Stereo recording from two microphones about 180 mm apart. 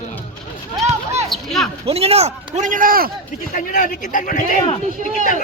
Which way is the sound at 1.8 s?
35° right (ahead or behind).